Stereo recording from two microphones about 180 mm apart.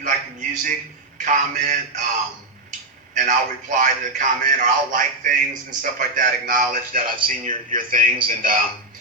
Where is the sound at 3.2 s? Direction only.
45° right (ahead or behind).